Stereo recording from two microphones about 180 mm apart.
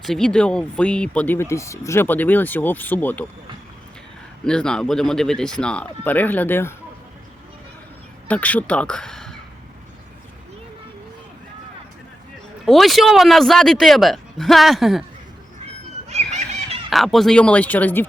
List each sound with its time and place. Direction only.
0.0 s speech: centre (ahead or behind)
4.4 s speech: 5° left (ahead or behind)
8.3 s speech: 10° left (ahead or behind)
12.6 s speech: centre (ahead or behind)
16.0 s a sound: 40° right (ahead or behind)
16.9 s speech: centre (ahead or behind)